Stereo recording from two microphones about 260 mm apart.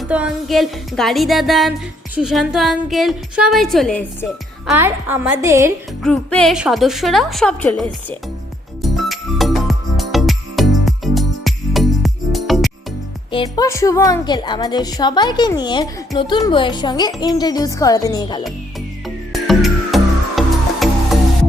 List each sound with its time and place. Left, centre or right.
0.0 s a woman's voice: centre
6.0 s a woman's voice: centre
8.8 s music: centre
13.3 s a woman's voice: centre
19.0 s music: centre